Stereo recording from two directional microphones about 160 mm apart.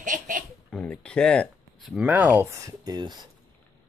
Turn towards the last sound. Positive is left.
turn(degrees=-25)  # may be behind; listen again after turning